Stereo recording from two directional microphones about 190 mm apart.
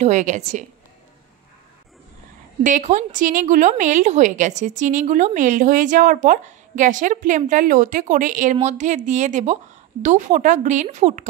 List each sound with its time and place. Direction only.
0.0 s a woman's voice: 40° right (ahead or behind)
2.6 s a woman's voice: 40° right (ahead or behind)